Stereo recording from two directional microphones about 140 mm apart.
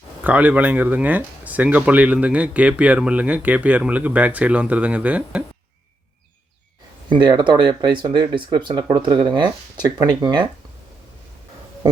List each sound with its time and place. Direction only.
0.3 s speech: 10° right (ahead or behind)
7.1 s speech: 35° right (ahead or behind)